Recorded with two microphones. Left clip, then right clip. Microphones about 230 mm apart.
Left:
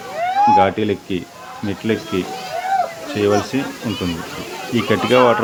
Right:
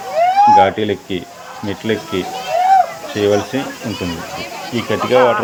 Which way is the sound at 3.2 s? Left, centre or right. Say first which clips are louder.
Right 2 dB; centre.